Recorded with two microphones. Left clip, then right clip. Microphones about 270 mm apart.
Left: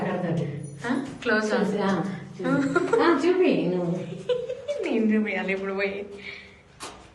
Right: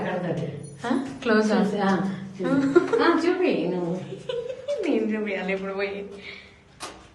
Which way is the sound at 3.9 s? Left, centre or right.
Centre.